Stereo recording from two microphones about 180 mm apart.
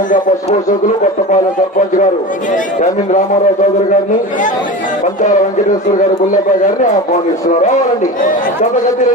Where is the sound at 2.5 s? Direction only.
45° left (ahead or behind).